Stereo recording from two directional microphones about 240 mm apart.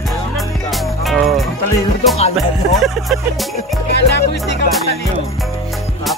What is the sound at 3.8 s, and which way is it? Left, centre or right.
Music, left.